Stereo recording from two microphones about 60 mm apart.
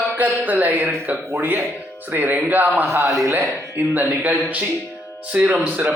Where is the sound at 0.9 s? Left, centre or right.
Right.